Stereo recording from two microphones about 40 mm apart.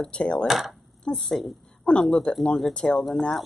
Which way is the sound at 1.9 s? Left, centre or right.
Left.